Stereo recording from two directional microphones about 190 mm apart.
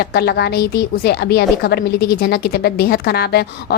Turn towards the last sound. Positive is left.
turn(degrees=55)  # may be behind; listen again after turning